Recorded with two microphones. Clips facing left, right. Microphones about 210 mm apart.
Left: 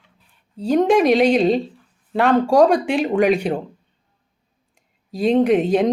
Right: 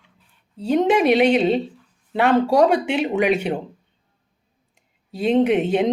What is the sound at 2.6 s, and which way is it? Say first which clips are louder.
Speech: left 2 dB; 5° right (ahead or behind).